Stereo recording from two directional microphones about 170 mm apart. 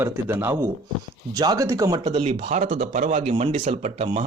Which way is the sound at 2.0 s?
35° right (ahead or behind).